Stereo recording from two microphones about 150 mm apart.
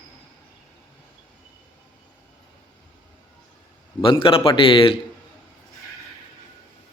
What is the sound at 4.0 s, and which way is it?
Speech, 35° left (ahead or behind).